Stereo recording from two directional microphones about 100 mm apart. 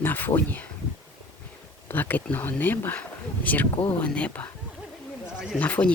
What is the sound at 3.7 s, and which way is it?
Speech, 60° left (ahead or behind).